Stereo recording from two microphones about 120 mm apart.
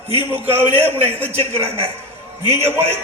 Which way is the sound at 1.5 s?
55° right (ahead or behind).